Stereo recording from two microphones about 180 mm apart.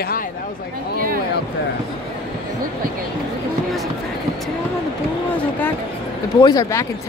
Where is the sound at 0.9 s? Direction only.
55° right (ahead or behind).